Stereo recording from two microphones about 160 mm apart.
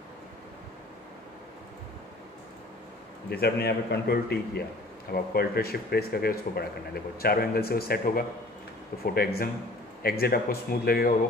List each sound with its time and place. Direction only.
3.3 s a man's voice: 90° left
5.1 s speech: 75° left (ahead or behind)